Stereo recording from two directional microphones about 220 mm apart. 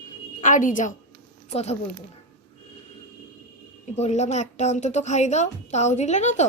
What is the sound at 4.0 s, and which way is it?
A woman's voice, 30° left (ahead or behind).